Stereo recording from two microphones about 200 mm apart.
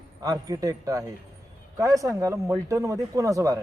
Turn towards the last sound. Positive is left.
turn(degrees=-15)  # may be behind; listen again after turning